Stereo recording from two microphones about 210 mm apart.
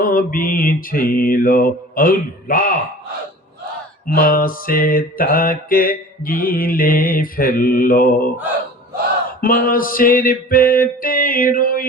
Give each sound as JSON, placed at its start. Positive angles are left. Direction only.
{"t": 0.0, "sound": "mantra", "side_deg": 40}
{"t": 4.1, "sound": "mantra", "side_deg": 45}
{"t": 9.4, "sound": "mantra", "side_deg": 40}